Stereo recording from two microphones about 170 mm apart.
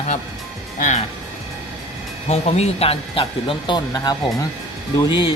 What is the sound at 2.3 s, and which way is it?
Speech, 40° left (ahead or behind).